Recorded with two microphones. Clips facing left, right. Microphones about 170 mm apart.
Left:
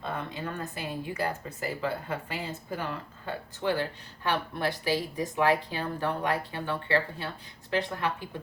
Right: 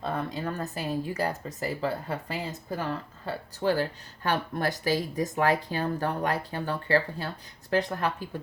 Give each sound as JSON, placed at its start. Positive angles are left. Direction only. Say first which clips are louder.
{"t": 0.0, "sound": "speech", "louder": "right 4 dB", "side_deg": -40}